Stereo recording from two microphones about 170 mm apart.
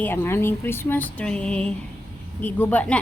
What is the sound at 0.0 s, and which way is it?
A woman's voice, 15° left (ahead or behind).